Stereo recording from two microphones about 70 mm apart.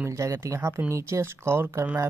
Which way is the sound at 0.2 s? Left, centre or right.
Right.